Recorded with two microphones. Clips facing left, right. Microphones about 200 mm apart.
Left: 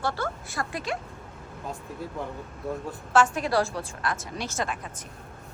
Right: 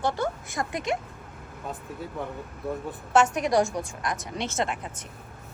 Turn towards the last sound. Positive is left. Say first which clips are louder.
# right 2 dB
turn(degrees=-20)  # may be behind; listen again after turning